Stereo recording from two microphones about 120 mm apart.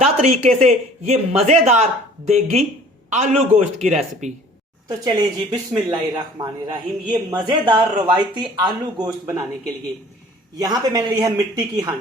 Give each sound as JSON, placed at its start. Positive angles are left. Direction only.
{"t": 0.2, "sound": "speech", "side_deg": -65}
{"t": 4.9, "sound": "speech", "side_deg": -35}
{"t": 10.6, "sound": "speech", "side_deg": -30}